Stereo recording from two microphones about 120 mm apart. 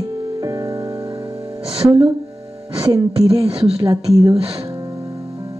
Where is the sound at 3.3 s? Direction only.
50° right (ahead or behind).